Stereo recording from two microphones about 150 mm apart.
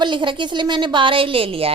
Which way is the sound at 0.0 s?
30° right (ahead or behind).